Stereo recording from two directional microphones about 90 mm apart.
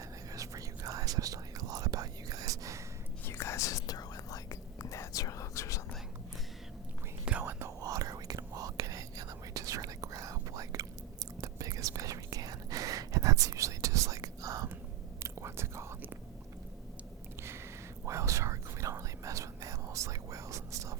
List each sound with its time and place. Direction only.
0.3 s whispering: 40° right (ahead or behind)
3.2 s whispering: 30° left (ahead or behind)
7.3 s whispering: 10° right (ahead or behind)
7.8 s whispering: 40° right (ahead or behind)
18.0 s whispering: 35° right (ahead or behind)